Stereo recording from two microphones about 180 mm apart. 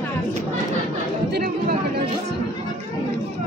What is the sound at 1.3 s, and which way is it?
Chatter, 60° right (ahead or behind).